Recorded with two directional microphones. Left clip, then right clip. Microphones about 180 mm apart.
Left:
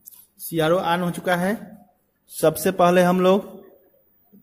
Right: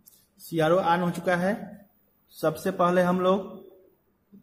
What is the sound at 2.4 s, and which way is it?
Speech, 55° left (ahead or behind).